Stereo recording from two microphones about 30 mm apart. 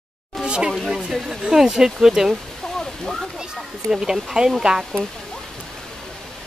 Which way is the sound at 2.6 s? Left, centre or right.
Centre.